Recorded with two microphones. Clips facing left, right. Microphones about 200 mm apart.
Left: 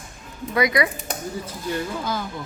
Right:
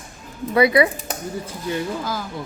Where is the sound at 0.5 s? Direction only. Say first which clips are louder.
Right 5 dB; 30° right (ahead or behind).